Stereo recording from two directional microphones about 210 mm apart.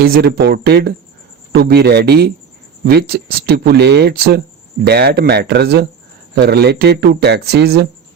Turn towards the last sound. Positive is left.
turn(degrees=-50)  # may be behind; listen again after turning